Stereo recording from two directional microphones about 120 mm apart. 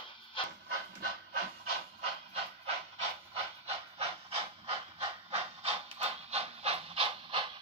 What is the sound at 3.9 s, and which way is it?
Hiss, 55° right (ahead or behind).